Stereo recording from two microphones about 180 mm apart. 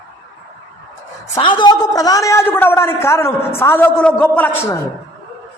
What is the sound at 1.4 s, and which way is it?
A man's voice, 25° left (ahead or behind).